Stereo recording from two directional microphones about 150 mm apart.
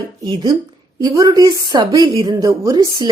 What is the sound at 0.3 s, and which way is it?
A woman's voice, 30° right (ahead or behind).